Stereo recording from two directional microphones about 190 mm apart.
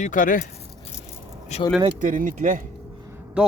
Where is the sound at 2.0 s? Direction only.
45° right (ahead or behind).